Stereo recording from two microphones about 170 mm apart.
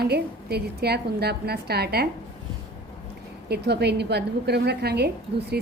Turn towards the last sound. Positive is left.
turn(degrees=-70)  # may be behind; listen again after turning